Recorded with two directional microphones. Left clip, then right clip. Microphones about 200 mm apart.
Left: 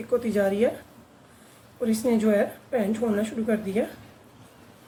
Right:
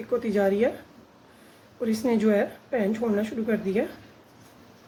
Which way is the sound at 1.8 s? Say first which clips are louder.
Even; 30° right (ahead or behind).